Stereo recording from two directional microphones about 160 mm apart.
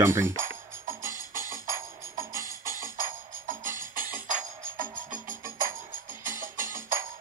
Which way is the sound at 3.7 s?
60° right (ahead or behind).